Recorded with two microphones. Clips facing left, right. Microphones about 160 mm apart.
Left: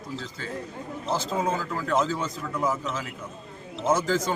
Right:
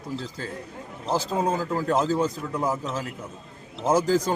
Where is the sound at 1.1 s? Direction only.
40° right (ahead or behind).